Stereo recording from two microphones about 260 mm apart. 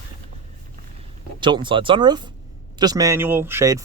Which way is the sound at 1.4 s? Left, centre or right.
Centre.